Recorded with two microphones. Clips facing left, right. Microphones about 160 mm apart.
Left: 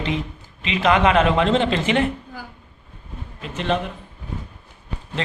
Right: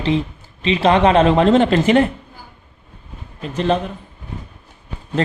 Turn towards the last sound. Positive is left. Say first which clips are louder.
# right 7 dB
turn(degrees=-45)  # may be behind; listen again after turning